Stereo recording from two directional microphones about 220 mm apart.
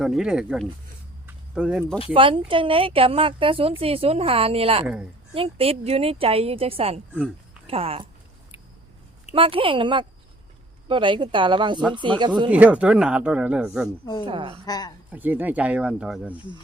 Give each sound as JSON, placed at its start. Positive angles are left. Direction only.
{"t": 0.0, "sound": "speech", "side_deg": 0}
{"t": 1.3, "sound": "a sound", "side_deg": -5}
{"t": 2.1, "sound": "a woman's voice", "side_deg": -25}
{"t": 9.3, "sound": "a woman's voice", "side_deg": -25}
{"t": 12.5, "sound": "speech", "side_deg": -5}
{"t": 14.0, "sound": "speech", "side_deg": 20}
{"t": 14.3, "sound": "a woman's voice", "side_deg": -25}
{"t": 14.7, "sound": "speech", "side_deg": 20}
{"t": 15.1, "sound": "speech", "side_deg": -10}